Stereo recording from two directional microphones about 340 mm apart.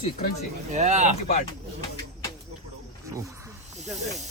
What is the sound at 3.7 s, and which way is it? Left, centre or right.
Speech, centre.